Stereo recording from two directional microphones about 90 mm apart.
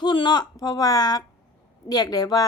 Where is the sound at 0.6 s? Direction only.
45° left (ahead or behind).